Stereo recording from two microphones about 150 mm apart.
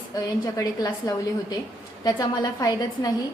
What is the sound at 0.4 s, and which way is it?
A woman's voice, 25° left (ahead or behind).